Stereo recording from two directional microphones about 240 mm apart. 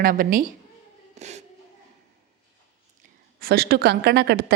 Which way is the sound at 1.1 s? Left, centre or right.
Right.